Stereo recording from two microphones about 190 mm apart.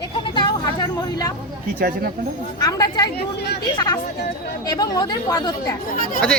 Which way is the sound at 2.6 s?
20° left (ahead or behind).